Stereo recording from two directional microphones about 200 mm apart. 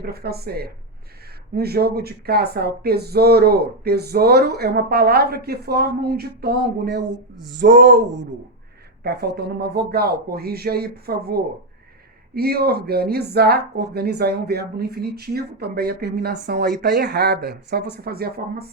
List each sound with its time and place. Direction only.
0.0 s speech: 50° right (ahead or behind)
9.0 s speech: 55° right (ahead or behind)